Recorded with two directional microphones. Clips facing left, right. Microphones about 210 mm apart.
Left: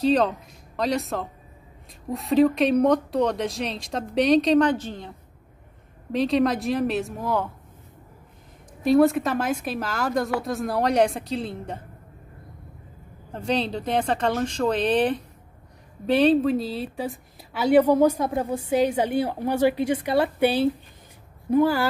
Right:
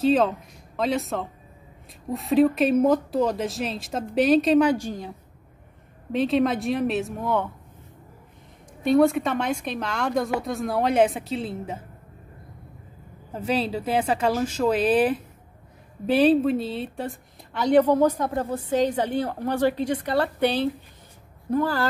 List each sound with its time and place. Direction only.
0.0 s speech: centre (ahead or behind)
6.1 s speech: centre (ahead or behind)
8.8 s speech: centre (ahead or behind)
13.3 s a woman's voice: 5° right (ahead or behind); by 21.8 s 10° left (ahead or behind)